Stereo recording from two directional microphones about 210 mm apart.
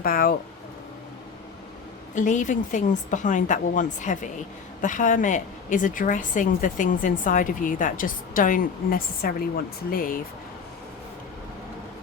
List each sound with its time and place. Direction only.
0.0 s speech: 45° left (ahead or behind)
2.1 s a woman's voice: 35° left (ahead or behind)